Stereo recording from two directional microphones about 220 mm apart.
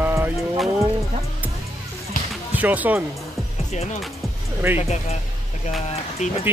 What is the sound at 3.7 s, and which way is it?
Speech, 30° left (ahead or behind).